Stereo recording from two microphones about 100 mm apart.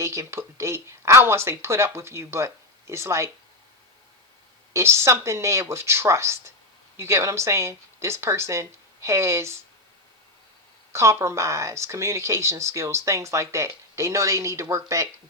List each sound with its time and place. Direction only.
0.0 s speech: 30° right (ahead or behind)
4.7 s speech: 25° right (ahead or behind)
10.9 s speech: 30° right (ahead or behind)